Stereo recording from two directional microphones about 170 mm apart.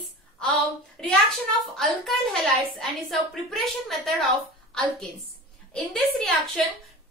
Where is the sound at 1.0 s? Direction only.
Centre (ahead or behind).